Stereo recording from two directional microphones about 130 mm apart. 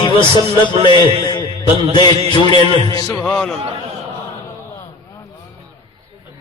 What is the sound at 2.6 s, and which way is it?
Speech, 45° right (ahead or behind).